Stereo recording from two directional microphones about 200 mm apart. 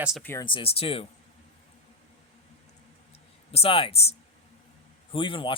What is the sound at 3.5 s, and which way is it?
Speech, 30° left (ahead or behind).